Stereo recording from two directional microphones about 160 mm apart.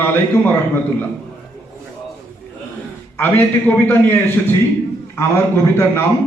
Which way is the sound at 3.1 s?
15° left (ahead or behind).